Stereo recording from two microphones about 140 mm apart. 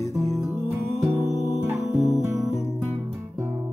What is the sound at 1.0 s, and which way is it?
Music, centre (ahead or behind).